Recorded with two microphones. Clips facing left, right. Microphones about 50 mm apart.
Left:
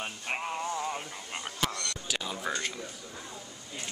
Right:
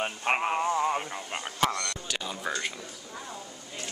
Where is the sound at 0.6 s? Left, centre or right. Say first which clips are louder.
Right 7 dB; right.